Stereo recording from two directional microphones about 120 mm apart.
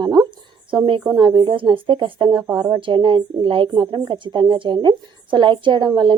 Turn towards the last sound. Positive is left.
turn(degrees=-40)  # may be behind; listen again after turning